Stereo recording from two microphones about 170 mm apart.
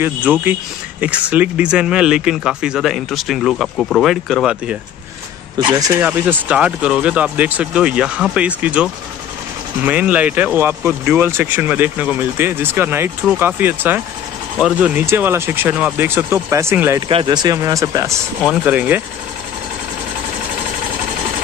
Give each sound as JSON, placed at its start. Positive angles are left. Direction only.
{"t": 0.0, "sound": "speech", "side_deg": -10}
{"t": 5.8, "sound": "speech", "side_deg": -10}
{"t": 17.1, "sound": "speech", "side_deg": -25}